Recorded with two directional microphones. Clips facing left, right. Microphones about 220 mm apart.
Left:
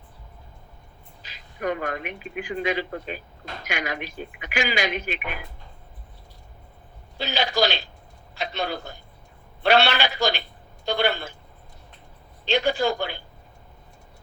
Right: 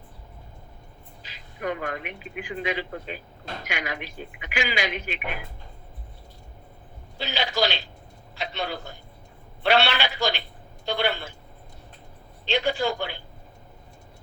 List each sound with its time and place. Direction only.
1.2 s speech: 45° left (ahead or behind)
7.2 s a man's voice: 45° left (ahead or behind)
12.5 s speech: 45° left (ahead or behind)